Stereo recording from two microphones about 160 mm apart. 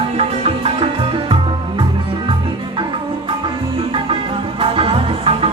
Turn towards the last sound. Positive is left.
turn(degrees=-35)  # may be behind; listen again after turning